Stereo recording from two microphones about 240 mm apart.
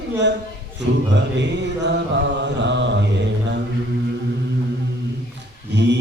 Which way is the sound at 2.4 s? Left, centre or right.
Right.